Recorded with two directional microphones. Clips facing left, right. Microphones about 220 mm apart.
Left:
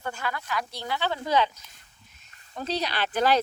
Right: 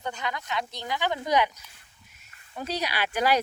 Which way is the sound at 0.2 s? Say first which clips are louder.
Even; 20° right (ahead or behind).